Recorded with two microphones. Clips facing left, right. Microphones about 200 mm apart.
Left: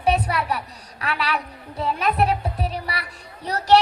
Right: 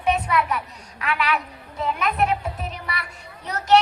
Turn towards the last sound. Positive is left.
turn(degrees=35)  # may be behind; listen again after turning